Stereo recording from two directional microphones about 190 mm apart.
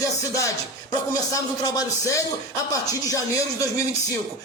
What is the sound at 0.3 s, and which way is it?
Speech, 15° left (ahead or behind).